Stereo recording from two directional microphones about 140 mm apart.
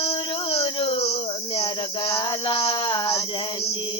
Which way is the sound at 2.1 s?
30° left (ahead or behind).